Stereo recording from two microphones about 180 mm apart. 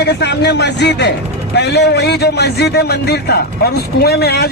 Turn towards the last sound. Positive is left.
turn(degrees=60)  # may be behind; listen again after turning